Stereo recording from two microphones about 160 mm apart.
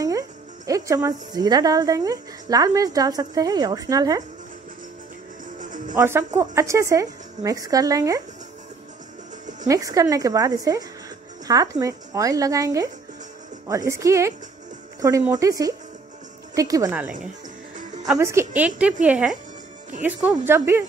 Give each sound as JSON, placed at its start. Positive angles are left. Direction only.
{"t": 0.7, "sound": "a woman's voice", "side_deg": -20}
{"t": 5.6, "sound": "music", "side_deg": -55}
{"t": 5.9, "sound": "a woman's voice", "side_deg": -15}
{"t": 9.7, "sound": "a woman's voice", "side_deg": -20}
{"t": 18.1, "sound": "a woman's voice", "side_deg": -15}